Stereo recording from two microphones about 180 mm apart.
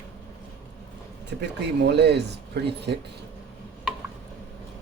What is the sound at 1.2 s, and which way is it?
Speech, 70° right (ahead or behind).